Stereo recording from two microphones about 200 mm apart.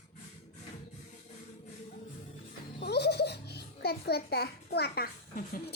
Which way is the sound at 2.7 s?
55° left (ahead or behind).